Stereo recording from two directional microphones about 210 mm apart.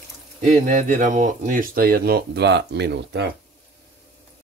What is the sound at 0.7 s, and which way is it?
Speech, 35° right (ahead or behind).